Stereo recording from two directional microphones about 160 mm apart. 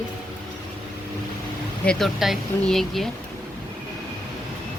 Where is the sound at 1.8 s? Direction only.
5° left (ahead or behind).